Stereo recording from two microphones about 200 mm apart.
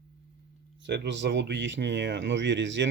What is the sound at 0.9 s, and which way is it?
Speech, 65° right (ahead or behind).